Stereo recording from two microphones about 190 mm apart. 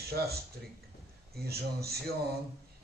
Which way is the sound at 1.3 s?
55° right (ahead or behind).